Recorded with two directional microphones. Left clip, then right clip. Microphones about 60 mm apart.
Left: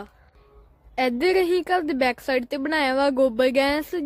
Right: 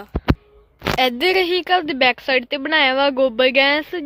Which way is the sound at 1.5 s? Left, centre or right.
Left.